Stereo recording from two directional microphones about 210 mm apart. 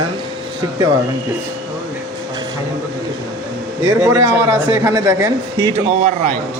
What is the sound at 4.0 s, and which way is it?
Speech, 15° right (ahead or behind).